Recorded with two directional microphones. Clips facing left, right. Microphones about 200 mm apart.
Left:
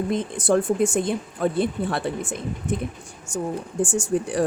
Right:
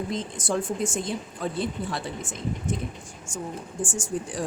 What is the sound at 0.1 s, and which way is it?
Speech, 60° left (ahead or behind).